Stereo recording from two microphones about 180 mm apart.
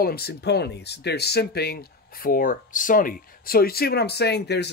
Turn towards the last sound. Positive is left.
turn(degrees=65)  # may be behind; listen again after turning